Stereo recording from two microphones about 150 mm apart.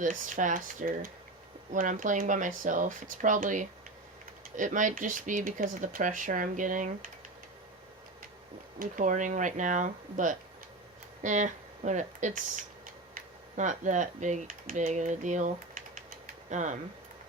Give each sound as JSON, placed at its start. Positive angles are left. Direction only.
{"t": 0.0, "sound": "speech", "side_deg": -60}
{"t": 8.8, "sound": "speech", "side_deg": -60}
{"t": 16.2, "sound": "a sound", "side_deg": -55}